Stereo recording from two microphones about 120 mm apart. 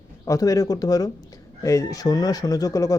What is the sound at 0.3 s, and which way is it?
Speech, 30° left (ahead or behind).